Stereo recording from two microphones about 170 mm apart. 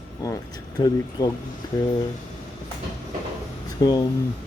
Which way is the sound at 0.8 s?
25° left (ahead or behind).